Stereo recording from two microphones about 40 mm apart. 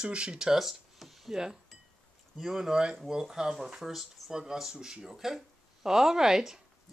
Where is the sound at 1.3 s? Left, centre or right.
Centre.